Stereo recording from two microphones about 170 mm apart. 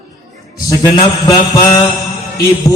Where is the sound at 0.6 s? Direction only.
20° left (ahead or behind).